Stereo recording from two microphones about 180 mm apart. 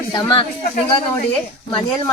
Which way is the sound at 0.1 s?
25° left (ahead or behind).